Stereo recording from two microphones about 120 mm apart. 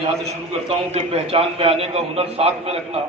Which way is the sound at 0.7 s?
50° right (ahead or behind).